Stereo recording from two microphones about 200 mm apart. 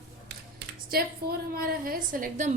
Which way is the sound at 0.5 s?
50° right (ahead or behind).